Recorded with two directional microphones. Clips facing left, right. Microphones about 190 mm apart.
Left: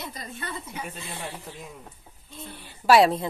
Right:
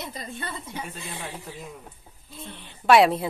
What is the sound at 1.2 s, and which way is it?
Speech, 15° right (ahead or behind).